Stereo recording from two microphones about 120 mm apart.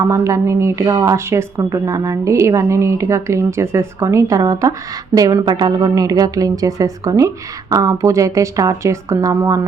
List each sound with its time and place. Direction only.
0.0 s a woman's voice: 25° right (ahead or behind)